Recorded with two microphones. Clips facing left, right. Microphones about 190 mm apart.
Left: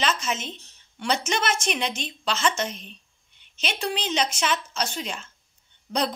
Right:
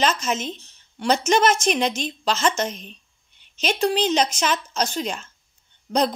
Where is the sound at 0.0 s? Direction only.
40° right (ahead or behind).